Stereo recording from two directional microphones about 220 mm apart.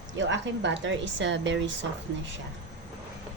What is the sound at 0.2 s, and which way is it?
A woman's voice, 55° right (ahead or behind).